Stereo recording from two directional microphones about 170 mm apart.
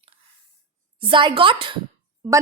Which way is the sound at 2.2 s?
20° right (ahead or behind).